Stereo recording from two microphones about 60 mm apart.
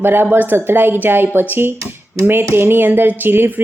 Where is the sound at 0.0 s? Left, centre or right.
Right.